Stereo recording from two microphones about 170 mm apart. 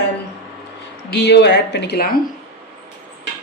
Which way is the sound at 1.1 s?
85° left.